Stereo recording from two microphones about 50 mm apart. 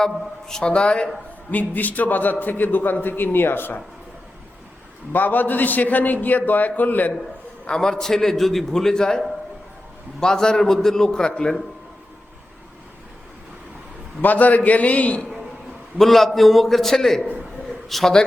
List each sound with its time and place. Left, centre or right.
0.0 s a man's voice: centre
1.5 s a man's voice: left
5.1 s a man's voice: left
7.7 s a man's voice: centre
14.2 s a man's voice: left
16.0 s a man's voice: centre